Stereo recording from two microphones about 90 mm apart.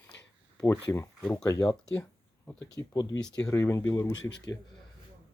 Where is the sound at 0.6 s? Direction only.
30° left (ahead or behind).